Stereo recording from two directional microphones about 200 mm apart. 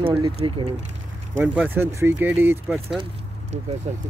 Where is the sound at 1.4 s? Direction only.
10° right (ahead or behind).